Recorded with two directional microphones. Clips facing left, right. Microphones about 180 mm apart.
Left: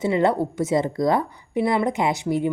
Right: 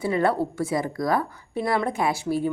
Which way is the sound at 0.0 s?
20° left (ahead or behind).